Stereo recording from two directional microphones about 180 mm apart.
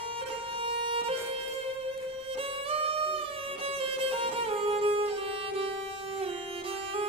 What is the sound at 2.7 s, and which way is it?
Music, 30° right (ahead or behind).